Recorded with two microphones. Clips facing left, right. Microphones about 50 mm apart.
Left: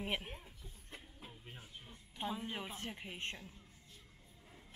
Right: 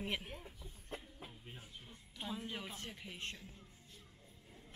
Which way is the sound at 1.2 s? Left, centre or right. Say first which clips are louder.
Even; centre.